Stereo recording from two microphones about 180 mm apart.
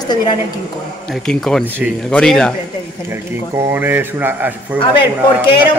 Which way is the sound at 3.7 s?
10° right (ahead or behind).